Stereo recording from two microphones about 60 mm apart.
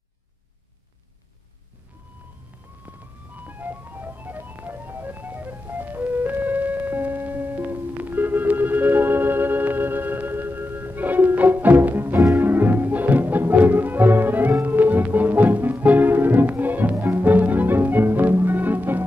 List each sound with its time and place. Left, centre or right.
3.4 s music: right